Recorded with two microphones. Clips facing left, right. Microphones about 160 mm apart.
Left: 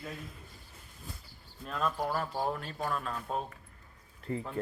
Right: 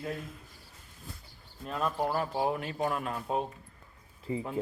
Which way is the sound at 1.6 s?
10° right (ahead or behind).